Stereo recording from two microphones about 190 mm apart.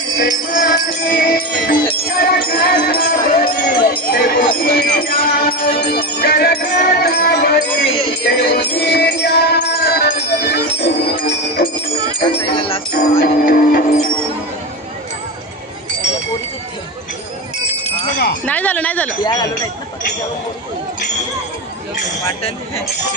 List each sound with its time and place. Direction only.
0.2 s music: 50° left (ahead or behind)
3.6 s jingle bell: 50° left (ahead or behind)
4.6 s music: 50° left (ahead or behind)
10.8 s bell: 60° left (ahead or behind)
12.2 s music: 30° left (ahead or behind)
13.2 s music: 50° left (ahead or behind)
18.4 s chink: 10° left (ahead or behind)
19.2 s speech: 20° left (ahead or behind)